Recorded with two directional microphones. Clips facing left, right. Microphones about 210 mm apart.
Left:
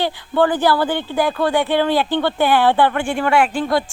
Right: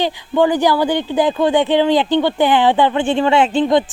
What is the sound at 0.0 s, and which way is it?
A woman's voice, 15° right (ahead or behind).